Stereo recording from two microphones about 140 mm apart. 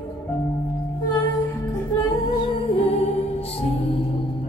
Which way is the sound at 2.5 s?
45° left (ahead or behind).